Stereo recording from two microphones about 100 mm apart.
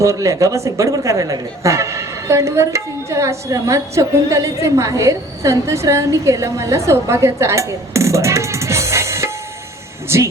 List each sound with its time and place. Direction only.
0.0 s speech: 30° right (ahead or behind)